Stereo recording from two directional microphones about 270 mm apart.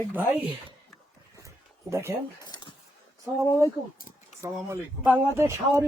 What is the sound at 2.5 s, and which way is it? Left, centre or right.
Dishes, centre.